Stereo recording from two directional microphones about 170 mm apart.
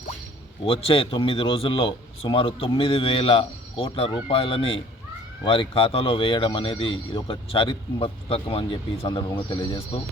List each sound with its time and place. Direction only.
0.6 s speech: 35° left (ahead or behind)